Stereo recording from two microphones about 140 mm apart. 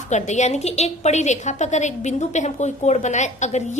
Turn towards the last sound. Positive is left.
turn(degrees=55)  # may be behind; listen again after turning